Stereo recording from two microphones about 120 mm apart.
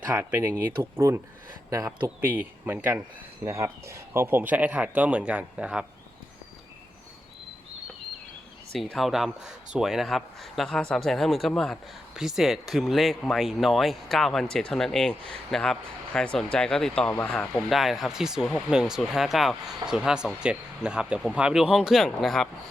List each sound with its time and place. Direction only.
0.1 s speech: 20° right (ahead or behind)
2.6 s speech: 15° right (ahead or behind)
8.7 s speech: centre (ahead or behind)